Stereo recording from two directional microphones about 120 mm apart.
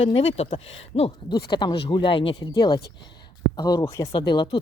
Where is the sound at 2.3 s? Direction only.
35° left (ahead or behind).